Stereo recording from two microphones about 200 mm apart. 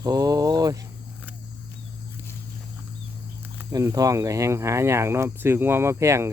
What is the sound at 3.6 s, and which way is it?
Speech, 15° right (ahead or behind).